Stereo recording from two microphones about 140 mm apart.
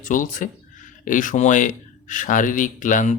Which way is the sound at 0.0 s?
70° left (ahead or behind).